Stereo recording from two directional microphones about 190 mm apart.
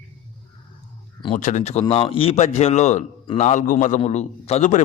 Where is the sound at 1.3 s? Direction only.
40° left (ahead or behind).